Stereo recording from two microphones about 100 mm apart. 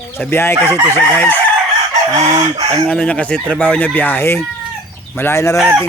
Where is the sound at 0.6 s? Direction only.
30° right (ahead or behind).